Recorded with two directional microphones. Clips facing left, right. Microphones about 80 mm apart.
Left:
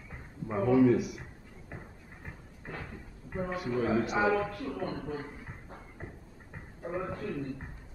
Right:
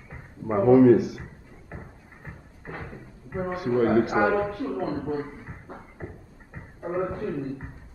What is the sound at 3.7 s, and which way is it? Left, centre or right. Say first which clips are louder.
Speech: right 8 dB; right.